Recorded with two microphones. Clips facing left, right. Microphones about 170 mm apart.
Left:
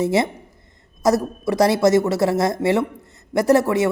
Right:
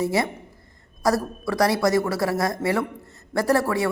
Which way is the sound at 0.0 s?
25° left (ahead or behind).